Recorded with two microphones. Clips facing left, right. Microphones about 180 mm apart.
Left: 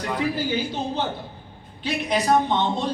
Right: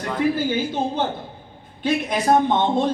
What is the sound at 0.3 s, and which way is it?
A man's voice, 50° right (ahead or behind).